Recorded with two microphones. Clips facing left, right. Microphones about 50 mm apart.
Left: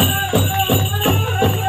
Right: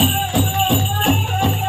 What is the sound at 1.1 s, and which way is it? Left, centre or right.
Music, centre.